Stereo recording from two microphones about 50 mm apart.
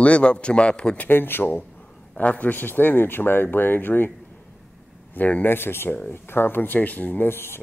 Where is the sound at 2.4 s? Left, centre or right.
Left.